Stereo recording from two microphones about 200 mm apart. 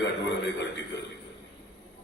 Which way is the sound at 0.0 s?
60° left (ahead or behind).